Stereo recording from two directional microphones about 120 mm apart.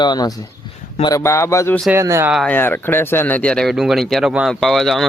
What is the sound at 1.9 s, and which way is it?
Speech, 25° right (ahead or behind).